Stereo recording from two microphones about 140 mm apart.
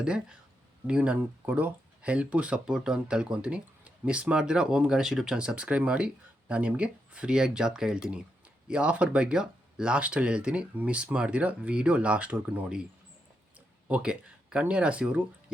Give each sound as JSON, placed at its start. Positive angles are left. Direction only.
{"t": 0.0, "sound": "speech", "side_deg": -5}